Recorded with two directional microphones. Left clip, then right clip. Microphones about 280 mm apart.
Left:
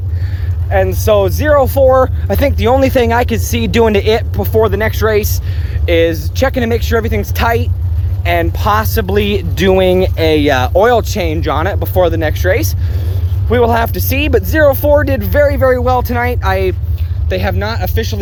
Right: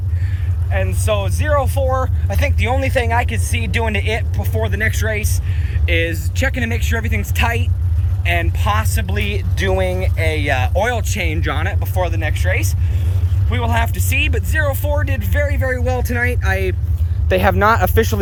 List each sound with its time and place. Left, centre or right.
0.7 s speech: left
11.9 s speech: left
17.2 s speech: centre